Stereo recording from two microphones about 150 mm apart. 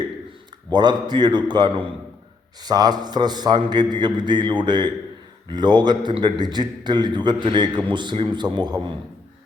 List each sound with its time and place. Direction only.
0.7 s a man's voice: 30° right (ahead or behind)